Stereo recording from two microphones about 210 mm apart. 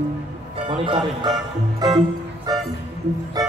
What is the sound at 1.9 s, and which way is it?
Music, 20° right (ahead or behind).